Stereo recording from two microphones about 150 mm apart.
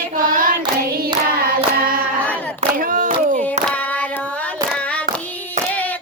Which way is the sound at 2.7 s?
65° right (ahead or behind).